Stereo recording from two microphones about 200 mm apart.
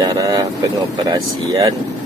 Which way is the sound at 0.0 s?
20° right (ahead or behind).